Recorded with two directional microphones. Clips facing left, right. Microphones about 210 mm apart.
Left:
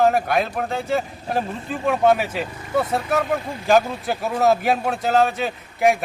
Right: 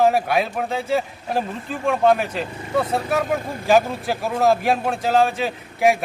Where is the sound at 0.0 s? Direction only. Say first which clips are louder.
Even; centre (ahead or behind).